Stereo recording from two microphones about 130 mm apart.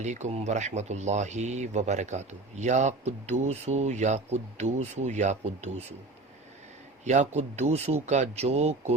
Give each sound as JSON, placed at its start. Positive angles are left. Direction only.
{"t": 0.0, "sound": "speech", "side_deg": -65}
{"t": 7.0, "sound": "speech", "side_deg": -60}